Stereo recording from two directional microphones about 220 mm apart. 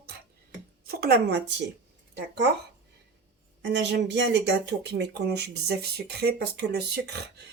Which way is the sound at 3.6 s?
50° right (ahead or behind).